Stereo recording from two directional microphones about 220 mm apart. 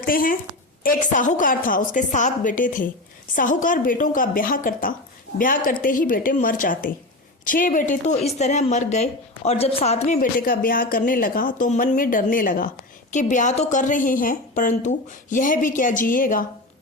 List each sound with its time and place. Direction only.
0.0 s speech: 40° left (ahead or behind)